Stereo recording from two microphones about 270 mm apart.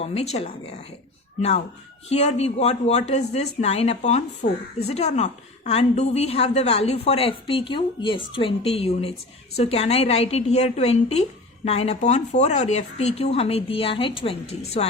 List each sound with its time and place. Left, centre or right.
0.0 s speech: left